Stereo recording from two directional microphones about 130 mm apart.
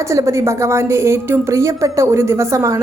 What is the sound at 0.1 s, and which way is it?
A woman's voice, 20° right (ahead or behind).